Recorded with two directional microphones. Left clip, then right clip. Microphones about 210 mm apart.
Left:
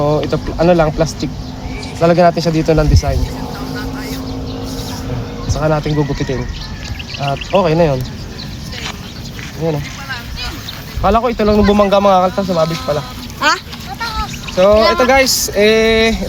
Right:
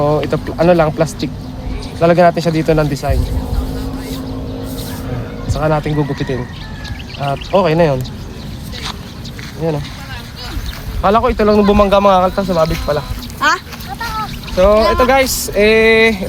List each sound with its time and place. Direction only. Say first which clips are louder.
0.0 s speech: even; 10° left (ahead or behind)
5.5 s speech: even; 10° left (ahead or behind)
11.0 s speech: right 1 dB; 5° left (ahead or behind)
13.4 s boat: even; 45° left (ahead or behind)
14.5 s speech: left 1 dB; centre (ahead or behind)